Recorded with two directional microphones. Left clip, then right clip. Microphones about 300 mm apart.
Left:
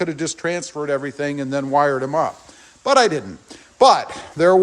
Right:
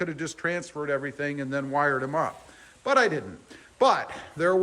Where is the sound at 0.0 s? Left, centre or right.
Centre.